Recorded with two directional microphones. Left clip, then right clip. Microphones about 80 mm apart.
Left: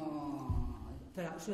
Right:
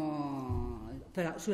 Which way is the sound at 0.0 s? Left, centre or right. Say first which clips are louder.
Right 5 dB; right.